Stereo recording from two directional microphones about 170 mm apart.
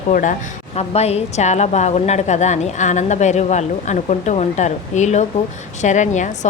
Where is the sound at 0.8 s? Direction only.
40° left (ahead or behind).